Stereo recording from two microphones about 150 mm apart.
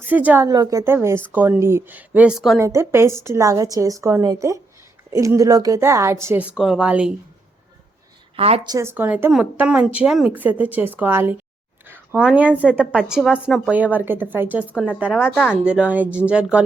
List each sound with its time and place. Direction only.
0.1 s a woman's voice: 10° right (ahead or behind)
0.4 s a woman's voice: 25° right (ahead or behind); by 2.6 s 5° right (ahead or behind)
2.6 s a woman's voice: 20° right (ahead or behind)
8.4 s a woman's voice: 40° right (ahead or behind)
8.6 s a woman's voice: 20° right (ahead or behind)